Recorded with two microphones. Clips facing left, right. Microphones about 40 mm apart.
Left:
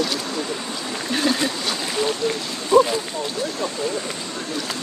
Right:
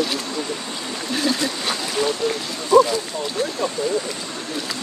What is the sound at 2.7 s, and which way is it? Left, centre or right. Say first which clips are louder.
Speech: right 1 dB; left.